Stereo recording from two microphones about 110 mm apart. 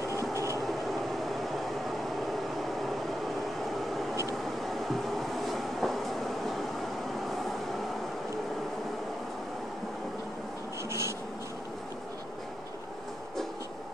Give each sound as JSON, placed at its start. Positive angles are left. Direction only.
{"t": 0.1, "sound": "train", "side_deg": -25}
{"t": 1.3, "sound": "a sound", "side_deg": 0}
{"t": 4.6, "sound": "train", "side_deg": 0}
{"t": 10.9, "sound": "writing", "side_deg": -25}